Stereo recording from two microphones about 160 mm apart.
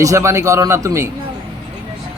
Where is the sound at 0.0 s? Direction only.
20° right (ahead or behind).